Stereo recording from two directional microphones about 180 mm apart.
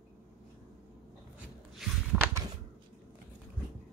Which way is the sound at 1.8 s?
Centre (ahead or behind).